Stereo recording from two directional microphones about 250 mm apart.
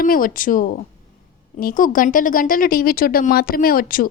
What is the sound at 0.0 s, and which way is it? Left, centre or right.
Speech, left.